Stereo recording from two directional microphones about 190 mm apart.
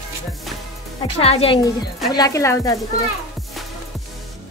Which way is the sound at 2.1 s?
20° left (ahead or behind).